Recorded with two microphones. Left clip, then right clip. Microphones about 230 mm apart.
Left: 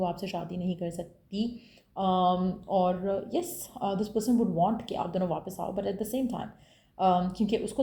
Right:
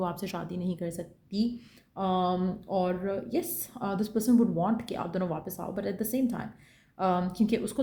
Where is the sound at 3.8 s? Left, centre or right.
Right.